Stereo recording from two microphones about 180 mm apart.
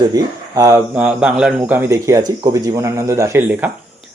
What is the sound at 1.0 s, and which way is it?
Speech, 5° right (ahead or behind).